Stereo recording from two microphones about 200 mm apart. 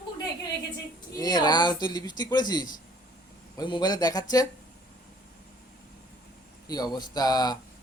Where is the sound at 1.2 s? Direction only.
20° left (ahead or behind).